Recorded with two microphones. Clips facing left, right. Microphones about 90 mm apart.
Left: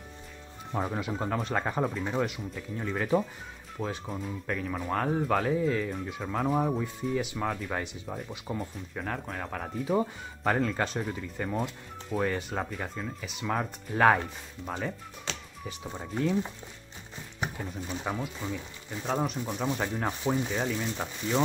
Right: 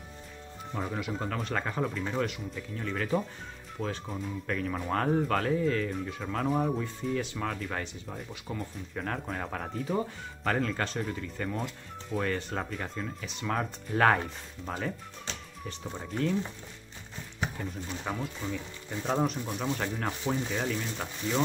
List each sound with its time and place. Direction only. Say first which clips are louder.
0.7 s speech: left 3 dB; 25° left (ahead or behind)
3.8 s speech: left 1 dB; 5° left (ahead or behind)
8.9 s speech: right 1 dB; centre (ahead or behind)
9.9 s speech: left 3 dB; 15° left (ahead or behind)
10.6 s speech: left 2 dB; 5° left (ahead or behind)
15.3 s music: left 3 dB; 85° left
15.8 s speech: left 1 dB; 10° left (ahead or behind)
17.4 s speech: even; 10° left (ahead or behind)